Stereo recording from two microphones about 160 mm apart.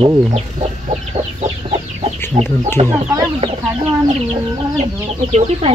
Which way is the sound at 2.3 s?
35° right (ahead or behind).